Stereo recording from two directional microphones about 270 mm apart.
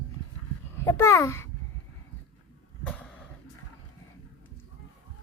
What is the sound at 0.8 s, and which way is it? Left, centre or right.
Speech, centre.